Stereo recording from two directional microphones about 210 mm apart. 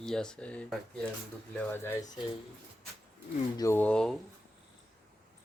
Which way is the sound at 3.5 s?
15° left (ahead or behind).